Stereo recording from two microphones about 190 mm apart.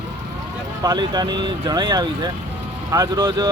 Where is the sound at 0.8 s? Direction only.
20° right (ahead or behind).